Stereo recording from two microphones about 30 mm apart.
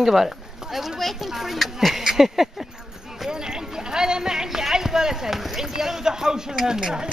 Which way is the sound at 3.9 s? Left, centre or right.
Right.